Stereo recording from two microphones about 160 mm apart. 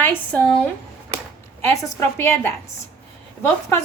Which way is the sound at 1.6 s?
20° left (ahead or behind).